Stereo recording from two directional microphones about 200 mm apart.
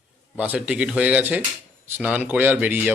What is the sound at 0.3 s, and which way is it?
Speech, 5° right (ahead or behind).